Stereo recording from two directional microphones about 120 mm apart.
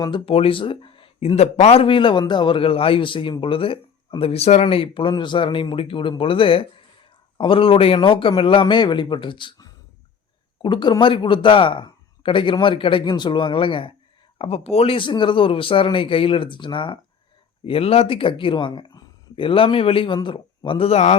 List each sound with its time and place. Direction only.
0.0 s speech: 40° left (ahead or behind)
14.3 s speech: 55° left (ahead or behind)
17.7 s speech: 55° left (ahead or behind)
20.1 s speech: 35° left (ahead or behind); by 21.2 s 60° left (ahead or behind)